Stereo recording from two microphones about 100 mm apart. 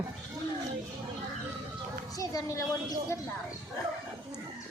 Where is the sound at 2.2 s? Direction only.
35° left (ahead or behind).